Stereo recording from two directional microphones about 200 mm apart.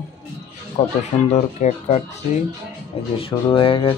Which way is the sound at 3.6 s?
25° left (ahead or behind).